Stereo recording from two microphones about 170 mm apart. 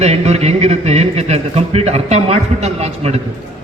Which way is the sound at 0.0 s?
40° right (ahead or behind).